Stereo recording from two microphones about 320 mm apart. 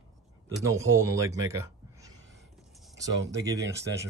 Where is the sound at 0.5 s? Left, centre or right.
Centre.